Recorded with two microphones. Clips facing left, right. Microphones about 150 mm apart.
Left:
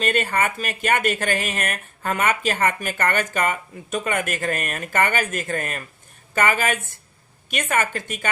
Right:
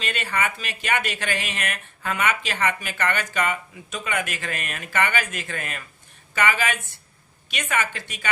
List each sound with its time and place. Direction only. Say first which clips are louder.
0.0 s speech: left 5 dB; 45° left (ahead or behind)